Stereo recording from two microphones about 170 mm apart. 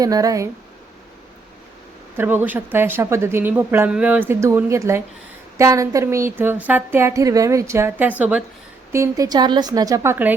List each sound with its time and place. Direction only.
0.0 s a woman's voice: 20° right (ahead or behind)
2.1 s a woman's voice: 10° right (ahead or behind)